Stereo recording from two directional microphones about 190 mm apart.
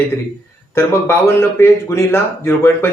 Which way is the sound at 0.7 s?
10° left (ahead or behind).